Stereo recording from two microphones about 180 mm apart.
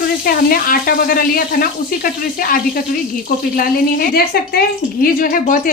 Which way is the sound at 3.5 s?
55° left (ahead or behind).